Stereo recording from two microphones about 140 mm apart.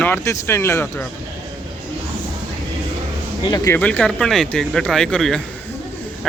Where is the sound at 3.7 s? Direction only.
10° left (ahead or behind).